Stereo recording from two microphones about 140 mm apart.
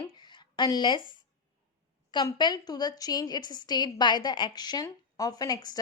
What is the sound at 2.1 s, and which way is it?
A woman's voice, 30° left (ahead or behind).